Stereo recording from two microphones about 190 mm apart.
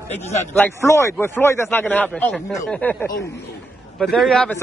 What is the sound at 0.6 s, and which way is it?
A man's voice, 10° left (ahead or behind).